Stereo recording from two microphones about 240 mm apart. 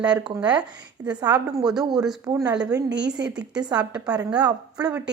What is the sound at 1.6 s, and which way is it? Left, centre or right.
A woman's voice, centre.